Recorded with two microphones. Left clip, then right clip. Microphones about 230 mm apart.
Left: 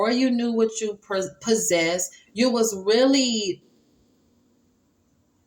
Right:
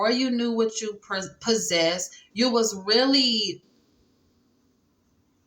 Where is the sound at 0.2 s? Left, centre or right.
Right.